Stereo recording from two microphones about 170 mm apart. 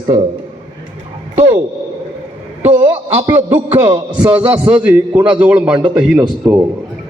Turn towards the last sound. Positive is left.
turn(degrees=-5)  # may be behind; listen again after turning